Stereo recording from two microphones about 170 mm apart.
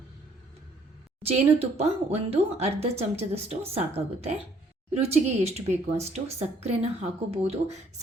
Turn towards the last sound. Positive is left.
turn(degrees=-35)  # may be behind; listen again after turning